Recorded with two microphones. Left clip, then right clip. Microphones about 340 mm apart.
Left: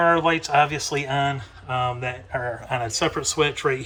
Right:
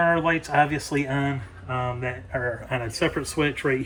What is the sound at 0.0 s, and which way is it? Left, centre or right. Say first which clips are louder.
Speech: left 3 dB; centre.